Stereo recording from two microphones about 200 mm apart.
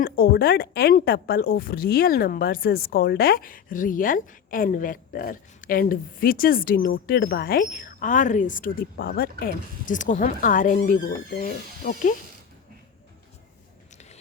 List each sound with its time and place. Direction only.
0.0 s speech: 50° left (ahead or behind)